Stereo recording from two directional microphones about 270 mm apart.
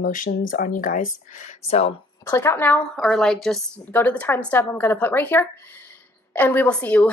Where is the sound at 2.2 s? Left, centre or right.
Centre.